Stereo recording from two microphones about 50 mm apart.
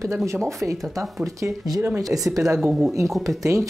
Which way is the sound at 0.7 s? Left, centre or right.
Right.